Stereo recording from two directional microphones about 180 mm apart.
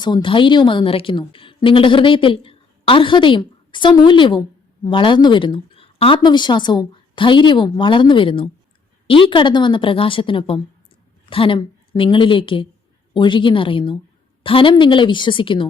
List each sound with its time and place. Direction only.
0.0 s a woman's voice: 25° left (ahead or behind)